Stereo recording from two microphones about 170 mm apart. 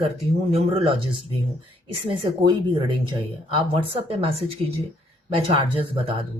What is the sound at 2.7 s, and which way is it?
Speech, 30° right (ahead or behind).